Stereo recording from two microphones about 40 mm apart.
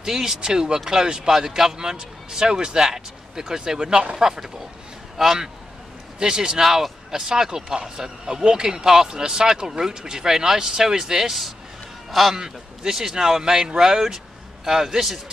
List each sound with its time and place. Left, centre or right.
0.0 s speech: centre
4.2 s a man's voice: centre
6.1 s a man's voice: centre
12.4 s speech: centre